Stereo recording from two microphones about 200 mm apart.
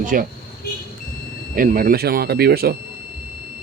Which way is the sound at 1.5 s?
45° right (ahead or behind).